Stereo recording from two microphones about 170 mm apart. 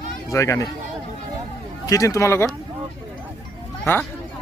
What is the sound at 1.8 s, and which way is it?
Speech, 20° left (ahead or behind).